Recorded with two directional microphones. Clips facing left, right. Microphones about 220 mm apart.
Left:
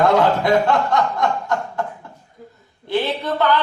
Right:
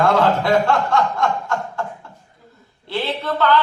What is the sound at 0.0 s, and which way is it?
Chuckle, 20° left (ahead or behind).